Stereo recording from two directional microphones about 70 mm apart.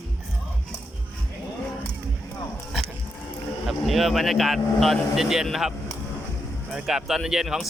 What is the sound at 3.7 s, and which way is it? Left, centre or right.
Speech, centre.